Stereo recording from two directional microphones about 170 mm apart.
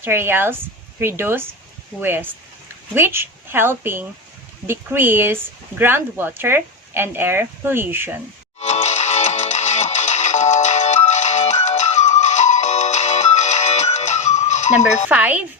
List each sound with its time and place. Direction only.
0.0 s speech: 15° right (ahead or behind)
8.6 s music: 40° left (ahead or behind)
15.1 s speech: 10° right (ahead or behind)